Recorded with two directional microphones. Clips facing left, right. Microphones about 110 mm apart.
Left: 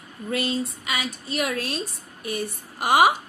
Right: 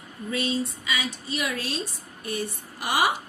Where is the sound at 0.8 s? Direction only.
75° left (ahead or behind).